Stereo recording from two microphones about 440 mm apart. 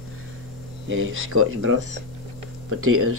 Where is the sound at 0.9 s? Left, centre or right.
Right.